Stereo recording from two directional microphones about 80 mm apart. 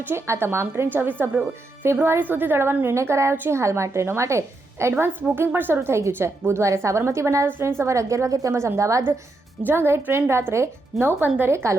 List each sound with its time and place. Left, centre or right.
0.1 s a woman's voice: right
9.6 s a woman's voice: right